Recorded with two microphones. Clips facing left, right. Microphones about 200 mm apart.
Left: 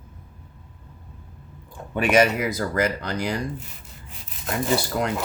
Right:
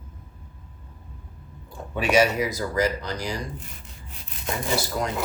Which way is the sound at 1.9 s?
55° left (ahead or behind).